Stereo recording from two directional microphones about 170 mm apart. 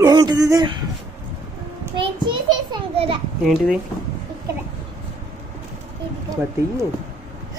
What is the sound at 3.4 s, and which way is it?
Speech, centre (ahead or behind).